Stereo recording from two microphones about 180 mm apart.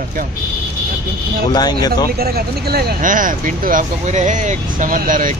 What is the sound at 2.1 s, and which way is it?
Speech, 60° right (ahead or behind).